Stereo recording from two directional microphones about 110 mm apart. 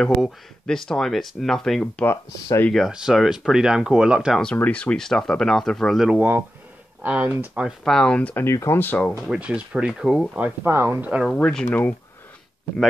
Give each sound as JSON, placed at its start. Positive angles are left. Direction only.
{"t": 0.0, "sound": "speech", "side_deg": 5}
{"t": 2.0, "sound": "speech", "side_deg": 25}
{"t": 2.7, "sound": "speech", "side_deg": -5}
{"t": 4.6, "sound": "speech", "side_deg": 10}
{"t": 7.0, "sound": "speech", "side_deg": -15}
{"t": 7.6, "sound": "speech", "side_deg": 5}
{"t": 8.5, "sound": "speech", "side_deg": 25}
{"t": 9.3, "sound": "speech", "side_deg": -10}
{"t": 10.6, "sound": "speech", "side_deg": -20}
{"t": 11.2, "sound": "speech", "side_deg": 10}